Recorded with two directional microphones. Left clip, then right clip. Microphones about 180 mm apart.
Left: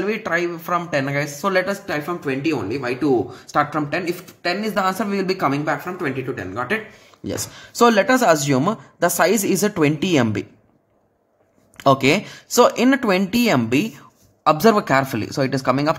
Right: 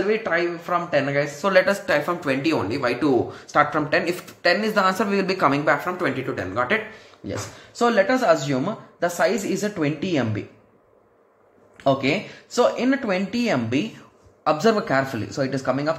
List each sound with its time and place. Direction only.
0.1 s speech: 40° left (ahead or behind)
1.4 s speech: 20° left (ahead or behind)
1.9 s speech: 5° left (ahead or behind)
2.8 s speech: 15° left (ahead or behind)
3.4 s speech: 30° left (ahead or behind)
3.9 s speech: 20° left (ahead or behind)
7.2 s speech: 45° left (ahead or behind)
11.7 s speech: 45° left (ahead or behind); by 16.0 s 25° left (ahead or behind)